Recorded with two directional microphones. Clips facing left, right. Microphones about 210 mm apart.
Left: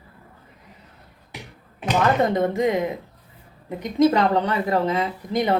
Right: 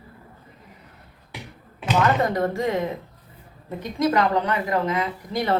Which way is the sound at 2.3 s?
20° left (ahead or behind).